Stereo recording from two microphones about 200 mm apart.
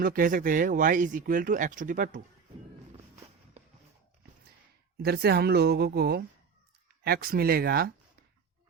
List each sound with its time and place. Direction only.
0.0 s speech: 45° right (ahead or behind)
3.6 s a sound: 35° right (ahead or behind)
5.0 s a woman's voice: 50° right (ahead or behind)